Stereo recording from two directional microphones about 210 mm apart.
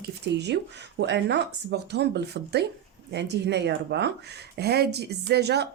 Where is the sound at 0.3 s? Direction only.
55° right (ahead or behind).